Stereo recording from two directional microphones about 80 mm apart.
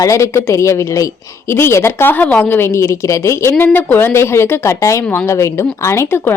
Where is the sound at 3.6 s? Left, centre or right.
Left.